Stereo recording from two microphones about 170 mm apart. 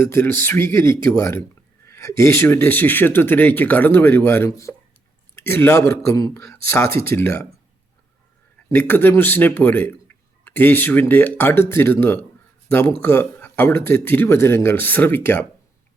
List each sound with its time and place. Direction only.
0.0 s speech: 15° left (ahead or behind)
8.7 s speech: 10° left (ahead or behind)